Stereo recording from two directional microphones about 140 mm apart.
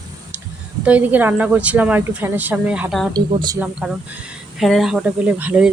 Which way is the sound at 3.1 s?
30° right (ahead or behind).